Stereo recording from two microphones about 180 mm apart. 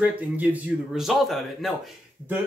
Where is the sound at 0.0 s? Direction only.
10° right (ahead or behind).